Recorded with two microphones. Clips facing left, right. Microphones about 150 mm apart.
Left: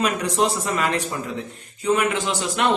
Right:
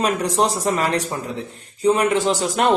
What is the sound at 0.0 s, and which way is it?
Speech, 35° right (ahead or behind).